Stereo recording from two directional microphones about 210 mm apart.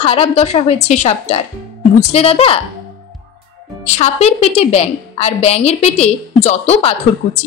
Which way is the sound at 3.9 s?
30° left (ahead or behind).